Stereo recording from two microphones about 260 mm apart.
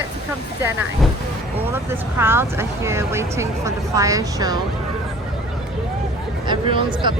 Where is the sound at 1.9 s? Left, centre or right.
Centre.